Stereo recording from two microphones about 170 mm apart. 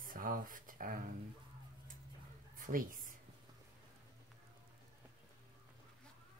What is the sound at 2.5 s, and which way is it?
Speech, 55° right (ahead or behind).